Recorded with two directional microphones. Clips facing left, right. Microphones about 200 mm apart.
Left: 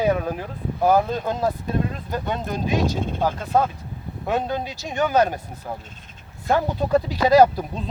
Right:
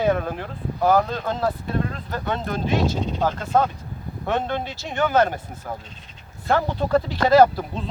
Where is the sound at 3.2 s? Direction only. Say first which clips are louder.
Even; 10° left (ahead or behind).